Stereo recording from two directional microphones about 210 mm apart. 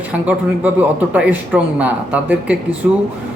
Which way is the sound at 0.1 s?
5° right (ahead or behind).